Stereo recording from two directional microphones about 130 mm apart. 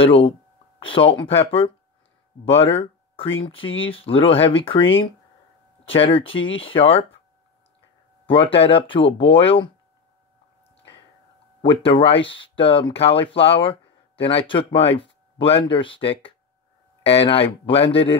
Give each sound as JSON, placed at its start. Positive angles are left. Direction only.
{"t": 0.0, "sound": "speech", "side_deg": 45}
{"t": 8.3, "sound": "speech", "side_deg": 45}
{"t": 11.6, "sound": "speech", "side_deg": 45}